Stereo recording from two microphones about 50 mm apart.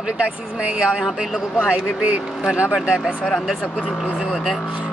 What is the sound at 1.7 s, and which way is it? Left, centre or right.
Speech, right.